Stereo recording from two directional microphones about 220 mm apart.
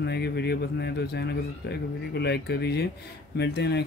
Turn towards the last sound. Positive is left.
turn(degrees=50)  # may be behind; listen again after turning